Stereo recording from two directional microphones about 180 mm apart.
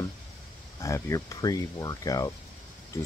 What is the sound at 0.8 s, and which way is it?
Speech, 15° left (ahead or behind).